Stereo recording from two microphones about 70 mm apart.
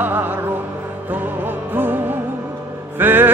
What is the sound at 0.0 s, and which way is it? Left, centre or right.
Music, right.